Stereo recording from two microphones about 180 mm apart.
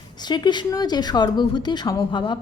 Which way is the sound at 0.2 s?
25° left (ahead or behind).